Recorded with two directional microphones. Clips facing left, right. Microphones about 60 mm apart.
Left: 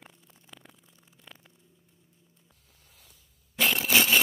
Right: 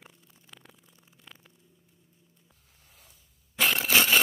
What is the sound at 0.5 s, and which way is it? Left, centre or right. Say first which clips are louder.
Vehicle: left 1 dB; centre.